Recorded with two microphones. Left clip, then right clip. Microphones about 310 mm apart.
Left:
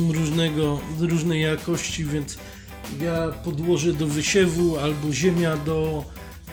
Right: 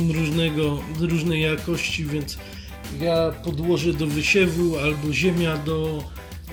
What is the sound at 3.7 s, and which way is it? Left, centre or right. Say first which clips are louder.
Speech: even; centre.